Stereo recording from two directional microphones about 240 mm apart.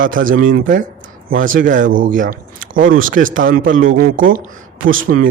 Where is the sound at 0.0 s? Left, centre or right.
Right.